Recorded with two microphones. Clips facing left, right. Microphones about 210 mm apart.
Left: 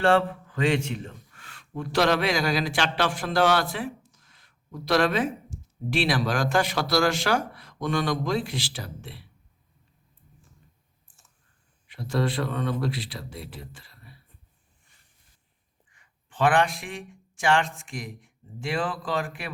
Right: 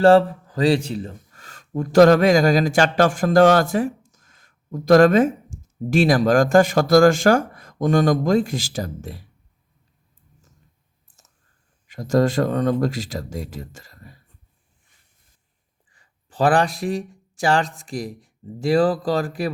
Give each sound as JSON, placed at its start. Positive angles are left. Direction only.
{"t": 0.0, "sound": "speech", "side_deg": -35}
{"t": 11.9, "sound": "speech", "side_deg": -45}
{"t": 15.9, "sound": "speech", "side_deg": -35}